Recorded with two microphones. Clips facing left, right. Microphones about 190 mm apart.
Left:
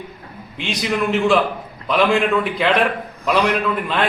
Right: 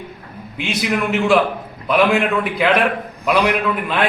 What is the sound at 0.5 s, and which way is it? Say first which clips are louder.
A man's voice: right 2 dB; 5° right (ahead or behind).